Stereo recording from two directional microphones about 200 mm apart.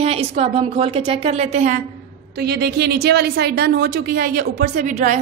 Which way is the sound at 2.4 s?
55° right (ahead or behind).